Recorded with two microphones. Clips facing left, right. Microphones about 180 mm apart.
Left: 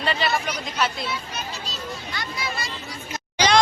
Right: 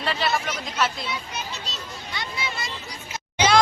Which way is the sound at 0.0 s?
Centre (ahead or behind).